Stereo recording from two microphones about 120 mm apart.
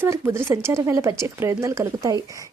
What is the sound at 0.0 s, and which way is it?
A woman's voice, 20° right (ahead or behind).